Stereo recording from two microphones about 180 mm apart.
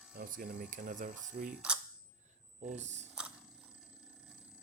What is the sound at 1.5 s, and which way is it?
Speech, 5° right (ahead or behind).